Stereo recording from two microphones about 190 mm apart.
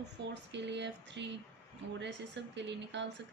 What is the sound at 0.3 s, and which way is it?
Speech, 65° right (ahead or behind).